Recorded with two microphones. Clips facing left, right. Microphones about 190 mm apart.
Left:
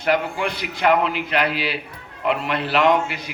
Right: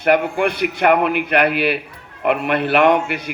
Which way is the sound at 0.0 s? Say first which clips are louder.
Right 5 dB; 55° right (ahead or behind).